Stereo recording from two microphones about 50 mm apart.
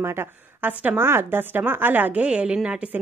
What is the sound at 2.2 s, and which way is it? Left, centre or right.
Speech, right.